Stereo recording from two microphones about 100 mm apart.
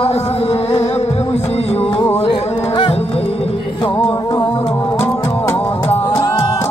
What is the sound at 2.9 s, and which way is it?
Music, 90° left.